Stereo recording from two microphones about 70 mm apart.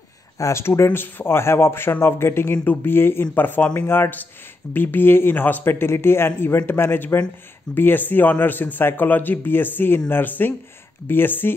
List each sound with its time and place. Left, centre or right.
0.4 s speech: left